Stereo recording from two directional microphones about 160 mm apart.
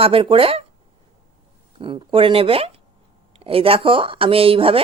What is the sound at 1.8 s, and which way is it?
Speech, 35° right (ahead or behind).